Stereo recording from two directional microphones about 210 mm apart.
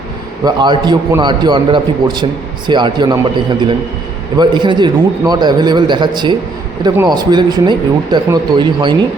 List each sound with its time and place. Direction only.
0.4 s speech: 20° right (ahead or behind)
4.4 s speech: 20° right (ahead or behind)